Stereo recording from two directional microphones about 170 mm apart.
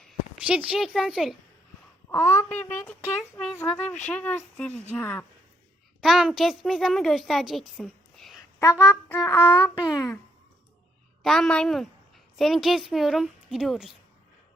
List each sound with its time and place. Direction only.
0.0 s speech: 5° right (ahead or behind)
2.0 s a woman's voice: 15° left (ahead or behind)
6.0 s a woman's voice: centre (ahead or behind)
8.5 s speech: 20° left (ahead or behind)
11.2 s a woman's voice: 5° left (ahead or behind)